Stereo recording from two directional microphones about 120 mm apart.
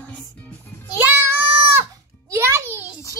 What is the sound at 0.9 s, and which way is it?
Child singing, 15° right (ahead or behind).